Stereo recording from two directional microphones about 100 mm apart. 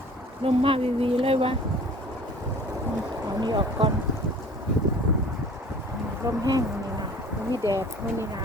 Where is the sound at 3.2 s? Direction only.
50° right (ahead or behind).